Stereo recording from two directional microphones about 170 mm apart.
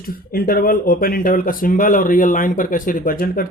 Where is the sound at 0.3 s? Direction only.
60° left (ahead or behind).